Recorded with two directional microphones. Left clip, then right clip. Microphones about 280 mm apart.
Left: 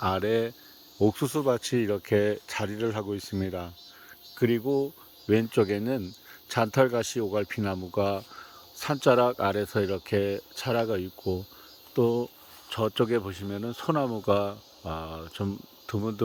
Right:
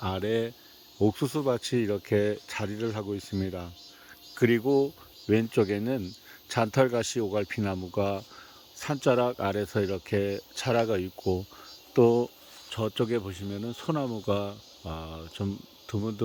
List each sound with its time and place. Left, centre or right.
0.0 s speech: centre
12.7 s speech: centre